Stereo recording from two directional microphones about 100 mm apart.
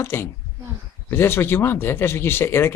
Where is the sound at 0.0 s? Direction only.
25° left (ahead or behind).